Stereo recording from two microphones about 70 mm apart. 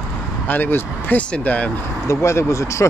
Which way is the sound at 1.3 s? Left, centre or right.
Left.